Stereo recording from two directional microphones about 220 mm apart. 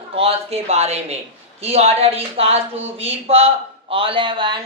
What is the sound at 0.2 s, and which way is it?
Speech, 30° right (ahead or behind).